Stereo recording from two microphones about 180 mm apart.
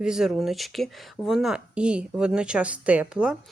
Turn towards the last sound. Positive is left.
turn(degrees=-5)  # may be behind; listen again after turning